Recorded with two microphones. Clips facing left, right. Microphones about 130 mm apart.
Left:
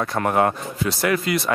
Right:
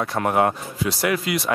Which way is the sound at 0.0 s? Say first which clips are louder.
Even; 5° right (ahead or behind).